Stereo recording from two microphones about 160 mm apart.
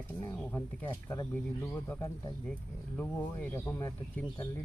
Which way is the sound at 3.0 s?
10° left (ahead or behind).